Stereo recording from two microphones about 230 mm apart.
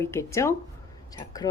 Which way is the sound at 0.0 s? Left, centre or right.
Centre.